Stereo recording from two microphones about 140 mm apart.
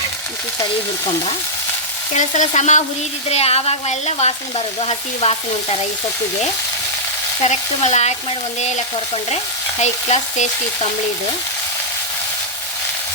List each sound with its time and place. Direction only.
2.1 s frying: 60° left (ahead or behind)
3.2 s frying: 50° left (ahead or behind)
7.4 s frying: 55° left (ahead or behind)
9.8 s frying: 60° left (ahead or behind)